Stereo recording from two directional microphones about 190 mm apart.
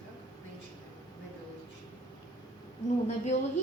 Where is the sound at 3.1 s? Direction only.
35° left (ahead or behind).